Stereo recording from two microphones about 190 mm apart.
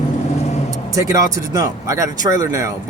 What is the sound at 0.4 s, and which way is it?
Vehicle, 35° left (ahead or behind).